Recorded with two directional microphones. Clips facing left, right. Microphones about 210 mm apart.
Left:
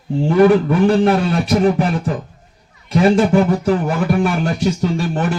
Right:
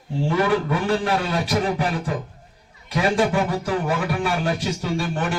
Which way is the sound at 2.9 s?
45° left (ahead or behind).